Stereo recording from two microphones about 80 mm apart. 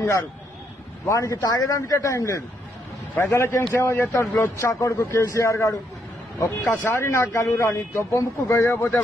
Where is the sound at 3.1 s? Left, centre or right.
Left.